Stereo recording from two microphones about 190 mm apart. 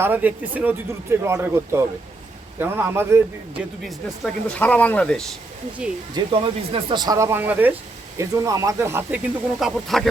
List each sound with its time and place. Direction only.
0.0 s speech: 10° right (ahead or behind)
3.8 s speech: 5° left (ahead or behind)
6.1 s speech: 30° right (ahead or behind); by 10.1 s centre (ahead or behind)